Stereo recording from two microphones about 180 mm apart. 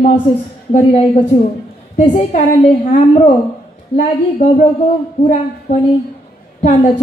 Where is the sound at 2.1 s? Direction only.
40° left (ahead or behind).